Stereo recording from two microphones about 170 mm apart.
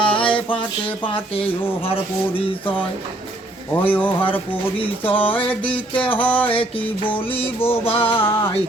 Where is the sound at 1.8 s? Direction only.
35° left (ahead or behind).